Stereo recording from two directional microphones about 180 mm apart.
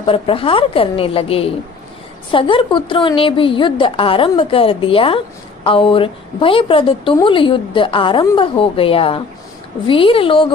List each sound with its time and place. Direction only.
0.0 s a woman's voice: 30° left (ahead or behind)